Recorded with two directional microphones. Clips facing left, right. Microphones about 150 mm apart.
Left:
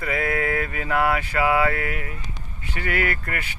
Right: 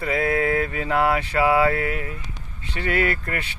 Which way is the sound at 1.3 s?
10° right (ahead or behind).